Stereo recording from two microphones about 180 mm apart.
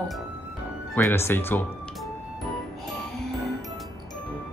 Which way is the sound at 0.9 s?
15° left (ahead or behind).